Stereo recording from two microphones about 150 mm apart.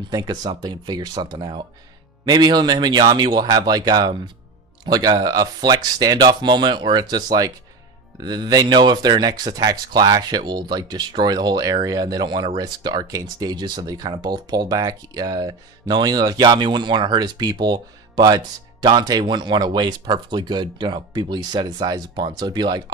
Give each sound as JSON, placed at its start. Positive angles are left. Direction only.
{"t": 0.1, "sound": "speech", "side_deg": -25}